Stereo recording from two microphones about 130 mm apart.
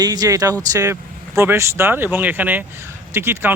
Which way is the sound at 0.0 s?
30° right (ahead or behind).